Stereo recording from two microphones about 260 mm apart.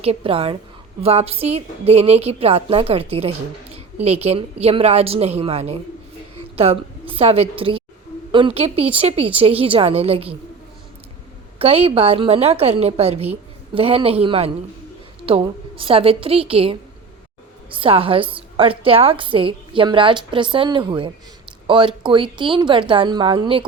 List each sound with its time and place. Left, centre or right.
0.0 s a woman's voice: right
11.6 s a woman's voice: right